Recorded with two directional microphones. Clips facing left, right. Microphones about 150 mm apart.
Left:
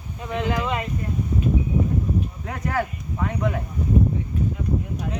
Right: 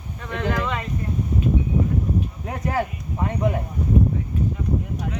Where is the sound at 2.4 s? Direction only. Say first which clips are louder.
Right 2 dB; 25° right (ahead or behind).